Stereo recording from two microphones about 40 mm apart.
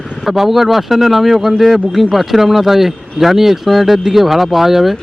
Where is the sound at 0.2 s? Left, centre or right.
Centre.